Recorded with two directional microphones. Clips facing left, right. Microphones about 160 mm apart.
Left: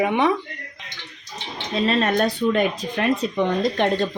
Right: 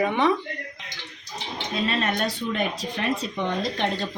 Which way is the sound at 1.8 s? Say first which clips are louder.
Left 6 dB; 40° left (ahead or behind).